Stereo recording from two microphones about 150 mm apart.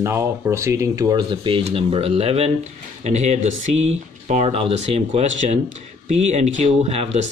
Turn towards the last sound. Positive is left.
turn(degrees=-45)  # may be behind; listen again after turning